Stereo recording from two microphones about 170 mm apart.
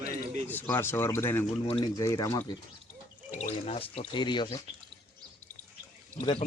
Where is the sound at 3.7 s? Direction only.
35° left (ahead or behind).